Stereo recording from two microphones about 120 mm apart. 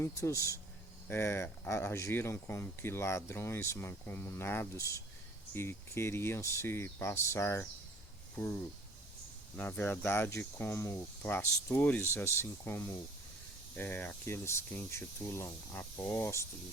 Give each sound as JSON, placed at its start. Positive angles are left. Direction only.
{"t": 0.0, "sound": "speech", "side_deg": 25}
{"t": 9.6, "sound": "speech", "side_deg": 15}